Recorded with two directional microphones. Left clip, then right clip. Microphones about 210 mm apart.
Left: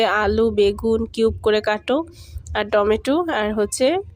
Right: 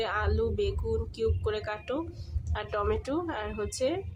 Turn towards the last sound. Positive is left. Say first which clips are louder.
# left 12 dB
turn(degrees=40)  # may be behind; listen again after turning